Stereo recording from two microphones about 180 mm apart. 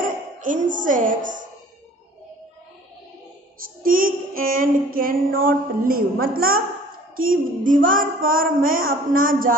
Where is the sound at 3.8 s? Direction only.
50° right (ahead or behind).